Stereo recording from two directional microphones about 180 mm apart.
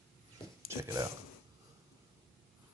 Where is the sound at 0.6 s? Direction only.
15° right (ahead or behind).